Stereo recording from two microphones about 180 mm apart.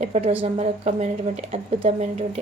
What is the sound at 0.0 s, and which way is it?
Speech, 35° right (ahead or behind).